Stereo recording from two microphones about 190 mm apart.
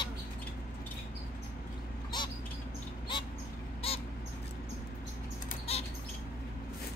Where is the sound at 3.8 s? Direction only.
30° left (ahead or behind).